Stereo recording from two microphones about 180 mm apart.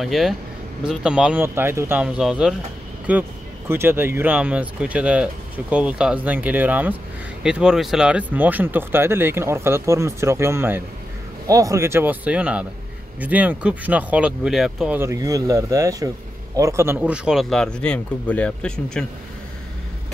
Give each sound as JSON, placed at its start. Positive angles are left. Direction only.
{"t": 0.0, "sound": "speech", "side_deg": 0}
{"t": 15.0, "sound": "speech", "side_deg": -15}